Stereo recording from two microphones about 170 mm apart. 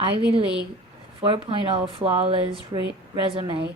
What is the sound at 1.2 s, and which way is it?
A woman's voice, 30° right (ahead or behind).